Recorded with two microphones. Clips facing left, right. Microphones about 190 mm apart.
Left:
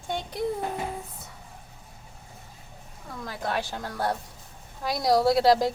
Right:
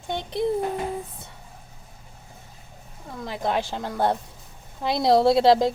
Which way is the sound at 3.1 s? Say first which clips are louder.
Right 5 dB; 20° right (ahead or behind).